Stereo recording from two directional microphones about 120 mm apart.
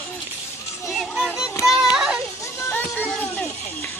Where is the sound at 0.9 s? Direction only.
Centre (ahead or behind).